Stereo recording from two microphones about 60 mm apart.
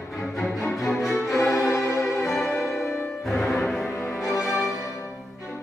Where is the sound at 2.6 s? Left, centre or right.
Left.